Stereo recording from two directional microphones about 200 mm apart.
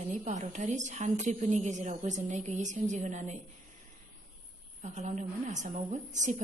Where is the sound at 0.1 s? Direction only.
40° right (ahead or behind).